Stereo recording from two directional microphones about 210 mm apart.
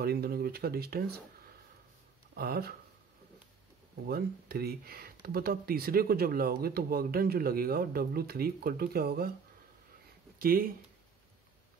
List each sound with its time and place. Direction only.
0.0 s speech: 50° right (ahead or behind)
2.3 s speech: 45° right (ahead or behind)
4.1 s speech: 45° right (ahead or behind)
10.4 s speech: 45° right (ahead or behind)